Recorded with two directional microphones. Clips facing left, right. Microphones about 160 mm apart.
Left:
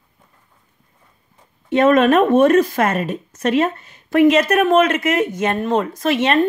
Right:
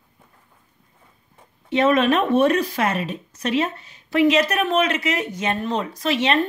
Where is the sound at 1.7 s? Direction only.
50° left (ahead or behind).